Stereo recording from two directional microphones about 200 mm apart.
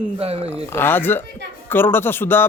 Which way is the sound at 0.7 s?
10° left (ahead or behind).